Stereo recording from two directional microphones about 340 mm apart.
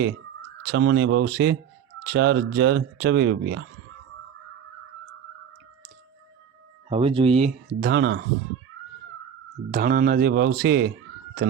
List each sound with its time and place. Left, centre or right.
0.6 s speech: right
6.9 s speech: centre
9.7 s speech: right